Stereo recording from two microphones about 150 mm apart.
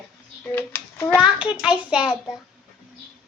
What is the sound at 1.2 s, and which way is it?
Hands, 5° right (ahead or behind).